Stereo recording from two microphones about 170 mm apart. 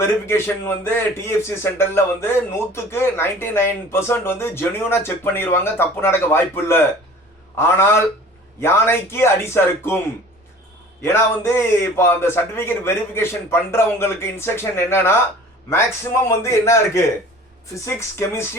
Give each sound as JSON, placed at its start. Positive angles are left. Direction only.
{"t": 0.0, "sound": "a man's voice", "side_deg": 15}
{"t": 11.0, "sound": "a man's voice", "side_deg": 15}
{"t": 16.2, "sound": "a man's voice", "side_deg": 15}